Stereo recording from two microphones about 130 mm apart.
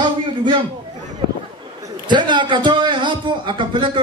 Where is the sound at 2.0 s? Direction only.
35° right (ahead or behind).